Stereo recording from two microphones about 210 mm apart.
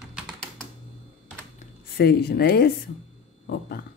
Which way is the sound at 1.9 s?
50° left (ahead or behind).